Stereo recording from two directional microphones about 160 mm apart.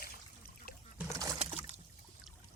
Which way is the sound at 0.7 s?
75° left (ahead or behind).